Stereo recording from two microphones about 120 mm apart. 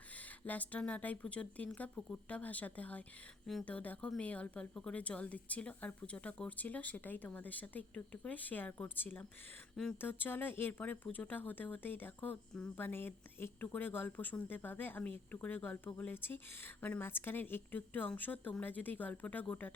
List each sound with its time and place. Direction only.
0.4 s speech: 15° left (ahead or behind)